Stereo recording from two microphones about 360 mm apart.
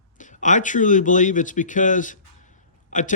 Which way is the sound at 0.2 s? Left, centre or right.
Left.